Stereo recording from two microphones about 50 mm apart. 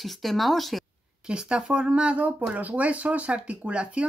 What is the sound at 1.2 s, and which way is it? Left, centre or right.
Speech, centre.